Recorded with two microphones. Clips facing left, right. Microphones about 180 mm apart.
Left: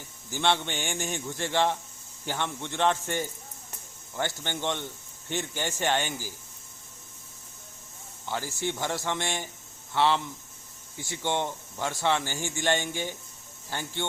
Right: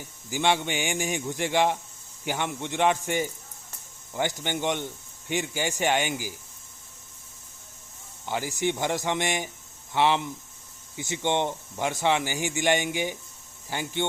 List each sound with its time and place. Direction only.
0.3 s speech: 10° right (ahead or behind)
8.3 s speech: 15° right (ahead or behind)